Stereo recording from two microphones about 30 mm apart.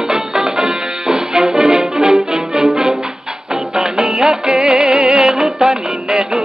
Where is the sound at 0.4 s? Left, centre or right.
Centre.